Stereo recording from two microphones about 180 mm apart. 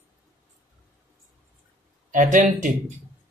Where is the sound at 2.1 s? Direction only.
45° right (ahead or behind).